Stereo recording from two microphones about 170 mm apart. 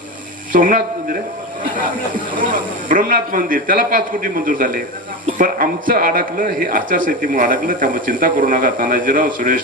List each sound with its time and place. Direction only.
0.5 s speech: 50° right (ahead or behind)
2.3 s a man's voice: 50° right (ahead or behind)
5.9 s a man's voice: 55° right (ahead or behind)